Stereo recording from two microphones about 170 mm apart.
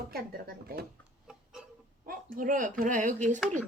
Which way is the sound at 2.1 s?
55° right (ahead or behind).